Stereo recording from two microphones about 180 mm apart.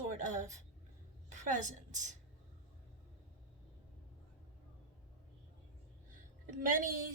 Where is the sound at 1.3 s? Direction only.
40° right (ahead or behind).